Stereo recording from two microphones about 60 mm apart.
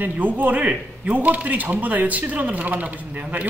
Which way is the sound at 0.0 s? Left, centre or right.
Right.